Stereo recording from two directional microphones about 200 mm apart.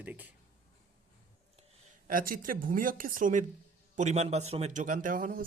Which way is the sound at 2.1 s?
45° right (ahead or behind).